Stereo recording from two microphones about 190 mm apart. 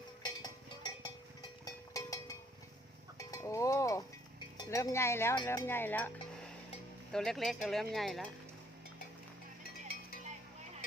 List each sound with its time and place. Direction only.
0.4 s a sound: 20° left (ahead or behind)
3.2 s music: 15° left (ahead or behind)
4.5 s speech: 15° left (ahead or behind)
7.1 s speech: centre (ahead or behind)